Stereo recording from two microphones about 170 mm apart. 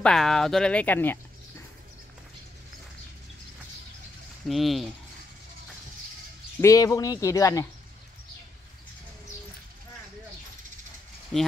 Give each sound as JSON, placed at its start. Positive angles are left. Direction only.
{"t": 0.0, "sound": "speech", "side_deg": 5}
{"t": 4.5, "sound": "speech", "side_deg": 0}
{"t": 6.6, "sound": "speech", "side_deg": 20}
{"t": 11.3, "sound": "speech", "side_deg": 0}